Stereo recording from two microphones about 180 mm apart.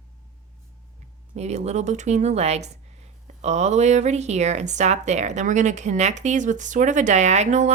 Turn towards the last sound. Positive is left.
turn(degrees=-40)  # may be behind; listen again after turning